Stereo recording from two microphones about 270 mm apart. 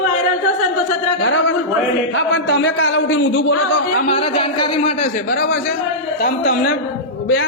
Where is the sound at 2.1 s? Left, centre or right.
Left.